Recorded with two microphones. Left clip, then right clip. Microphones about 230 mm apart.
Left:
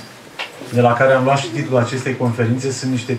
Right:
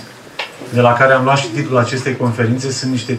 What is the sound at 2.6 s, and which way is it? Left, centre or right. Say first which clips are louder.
Speech: right 1 dB; centre.